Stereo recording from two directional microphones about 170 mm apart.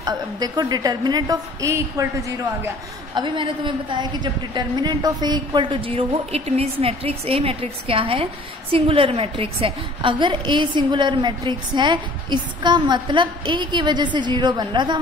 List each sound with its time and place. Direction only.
0.0 s a woman's voice: 25° right (ahead or behind)